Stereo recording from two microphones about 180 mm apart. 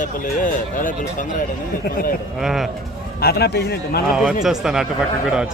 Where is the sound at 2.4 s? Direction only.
Centre (ahead or behind).